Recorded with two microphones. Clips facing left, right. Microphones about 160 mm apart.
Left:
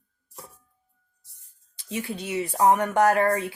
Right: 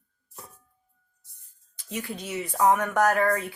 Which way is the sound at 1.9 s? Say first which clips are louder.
Left 3 dB; 25° left (ahead or behind).